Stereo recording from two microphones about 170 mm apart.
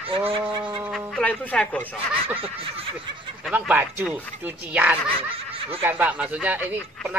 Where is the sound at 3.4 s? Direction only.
10° right (ahead or behind).